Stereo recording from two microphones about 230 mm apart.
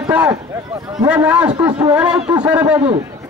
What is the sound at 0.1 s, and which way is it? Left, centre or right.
A man's voice, centre.